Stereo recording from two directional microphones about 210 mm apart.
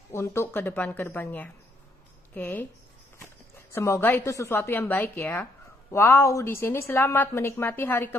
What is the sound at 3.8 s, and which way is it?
A woman's voice, 15° left (ahead or behind).